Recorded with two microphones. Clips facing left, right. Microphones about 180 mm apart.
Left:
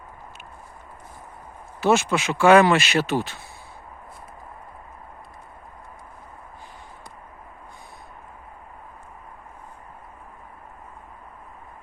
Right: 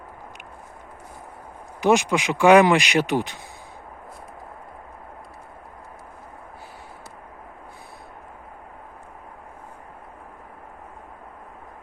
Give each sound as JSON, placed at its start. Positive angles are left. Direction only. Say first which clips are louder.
{"t": 1.8, "sound": "speech", "louder": "right 1 dB", "side_deg": -15}